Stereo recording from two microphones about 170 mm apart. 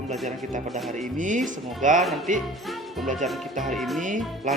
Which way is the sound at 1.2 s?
50° right (ahead or behind).